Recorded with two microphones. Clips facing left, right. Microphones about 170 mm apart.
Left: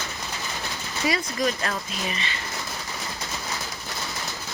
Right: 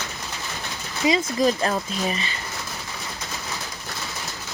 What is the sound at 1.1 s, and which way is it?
Speech, 30° right (ahead or behind).